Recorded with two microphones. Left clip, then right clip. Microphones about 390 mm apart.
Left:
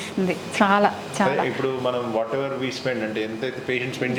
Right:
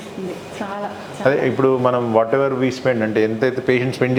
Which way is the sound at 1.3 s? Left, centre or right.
Right.